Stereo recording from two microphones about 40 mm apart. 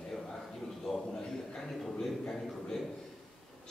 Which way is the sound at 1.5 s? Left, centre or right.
Centre.